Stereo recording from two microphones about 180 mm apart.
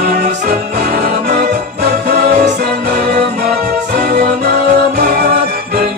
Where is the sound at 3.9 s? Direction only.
60° right (ahead or behind).